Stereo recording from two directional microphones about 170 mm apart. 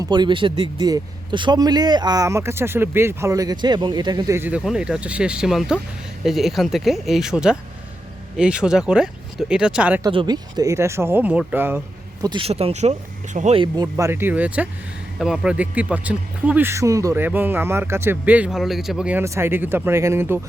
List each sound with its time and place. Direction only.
0.0 s speech: 25° right (ahead or behind)
4.4 s speech: 10° right (ahead or behind)
10.0 s speech: 25° right (ahead or behind); by 11.8 s 10° right (ahead or behind)
12.2 s speech: 30° right (ahead or behind)
13.6 s speech: 20° right (ahead or behind)